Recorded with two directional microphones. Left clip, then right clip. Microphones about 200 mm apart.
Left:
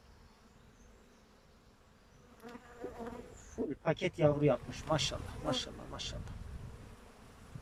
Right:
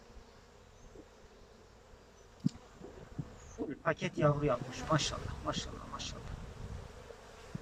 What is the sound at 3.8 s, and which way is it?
Speech, 15° left (ahead or behind).